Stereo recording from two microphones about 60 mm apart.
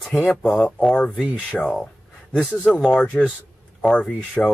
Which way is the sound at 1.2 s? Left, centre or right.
Centre.